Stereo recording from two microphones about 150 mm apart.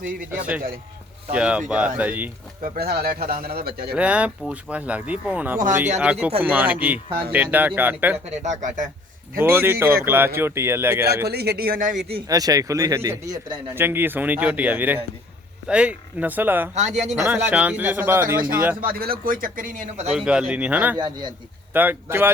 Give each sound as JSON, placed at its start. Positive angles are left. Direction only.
{"t": 0.3, "sound": "speech", "side_deg": -10}
{"t": 2.7, "sound": "speech", "side_deg": -90}
{"t": 3.9, "sound": "speech", "side_deg": -10}
{"t": 8.2, "sound": "speech", "side_deg": -50}
{"t": 9.4, "sound": "speech", "side_deg": -15}
{"t": 11.3, "sound": "a man's voice", "side_deg": -90}
{"t": 12.3, "sound": "speech", "side_deg": -25}
{"t": 16.7, "sound": "speech", "side_deg": -50}
{"t": 17.2, "sound": "speech", "side_deg": -15}
{"t": 18.8, "sound": "a man's voice", "side_deg": -80}
{"t": 20.1, "sound": "speech", "side_deg": -5}
{"t": 21.0, "sound": "speech", "side_deg": -30}
{"t": 21.7, "sound": "speech", "side_deg": -10}